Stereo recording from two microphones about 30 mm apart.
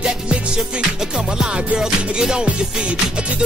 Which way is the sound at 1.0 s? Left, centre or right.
Right.